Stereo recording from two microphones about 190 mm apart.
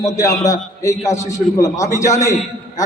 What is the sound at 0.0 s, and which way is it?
A man's voice, 15° left (ahead or behind).